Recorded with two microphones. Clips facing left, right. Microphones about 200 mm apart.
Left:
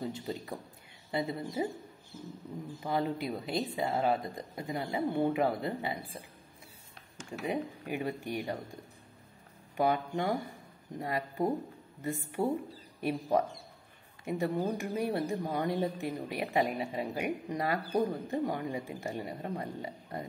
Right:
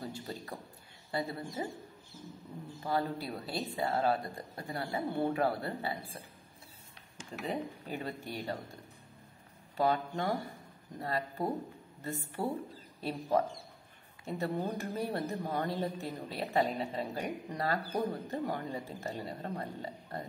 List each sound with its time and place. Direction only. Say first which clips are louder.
0.0 s a woman's voice: left 4 dB; 20° left (ahead or behind)
2.8 s speech: left 2 dB; 20° left (ahead or behind)
7.2 s speech: left 3 dB; 10° left (ahead or behind)
9.8 s speech: left 1 dB; 15° left (ahead or behind)
14.2 s speech: left 3 dB; 15° left (ahead or behind)